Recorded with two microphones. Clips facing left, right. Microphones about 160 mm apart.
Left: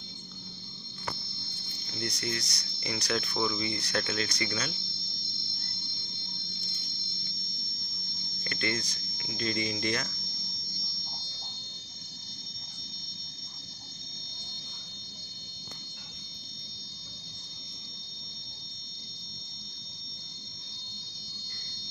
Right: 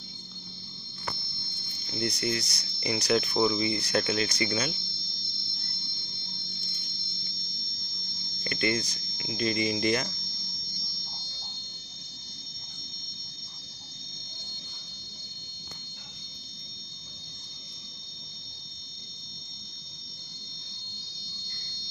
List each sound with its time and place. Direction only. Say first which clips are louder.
2.0 s speech: right 5 dB; 10° right (ahead or behind)
8.5 s speech: right 5 dB; 10° right (ahead or behind)